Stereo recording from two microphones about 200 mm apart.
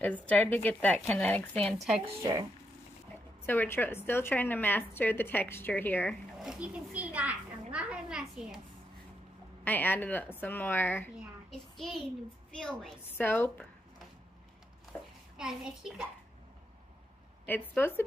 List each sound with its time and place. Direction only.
0.0 s a woman's voice: 5° left (ahead or behind)
3.4 s a woman's voice: 10° left (ahead or behind)
6.3 s a child's voice: centre (ahead or behind)
9.7 s a woman's voice: 10° left (ahead or behind)
14.9 s a child's voice: 5° right (ahead or behind)
17.5 s a woman's voice: 10° left (ahead or behind)